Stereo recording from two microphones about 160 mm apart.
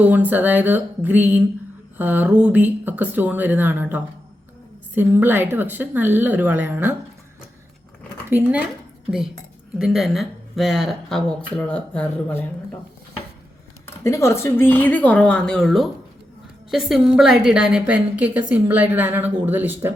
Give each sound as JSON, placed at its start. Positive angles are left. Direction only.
{"t": 0.0, "sound": "a woman's voice", "side_deg": -10}
{"t": 8.3, "sound": "a woman's voice", "side_deg": -10}
{"t": 14.0, "sound": "a woman's voice", "side_deg": 20}